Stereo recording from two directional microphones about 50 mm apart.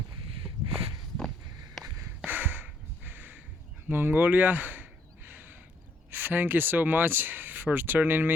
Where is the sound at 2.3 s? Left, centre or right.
Right.